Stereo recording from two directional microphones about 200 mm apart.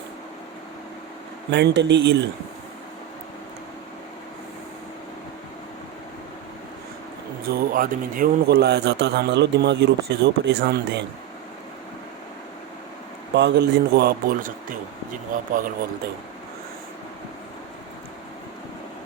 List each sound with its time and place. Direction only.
1.5 s a man's voice: 60° right (ahead or behind)
7.4 s a man's voice: 45° right (ahead or behind)
13.3 s a man's voice: 60° right (ahead or behind); by 15.5 s 45° right (ahead or behind)